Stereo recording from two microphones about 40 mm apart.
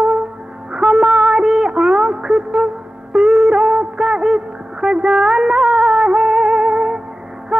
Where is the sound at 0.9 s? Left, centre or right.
Centre.